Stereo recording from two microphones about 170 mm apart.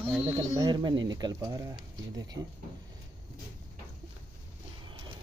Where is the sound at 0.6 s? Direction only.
25° right (ahead or behind).